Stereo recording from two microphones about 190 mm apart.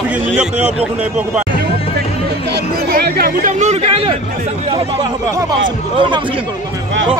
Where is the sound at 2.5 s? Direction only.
55° right (ahead or behind); by 4.2 s 30° right (ahead or behind).